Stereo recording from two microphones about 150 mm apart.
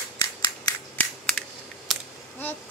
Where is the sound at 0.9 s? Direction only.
10° left (ahead or behind).